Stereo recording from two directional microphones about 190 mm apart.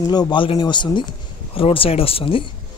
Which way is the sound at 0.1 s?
25° left (ahead or behind).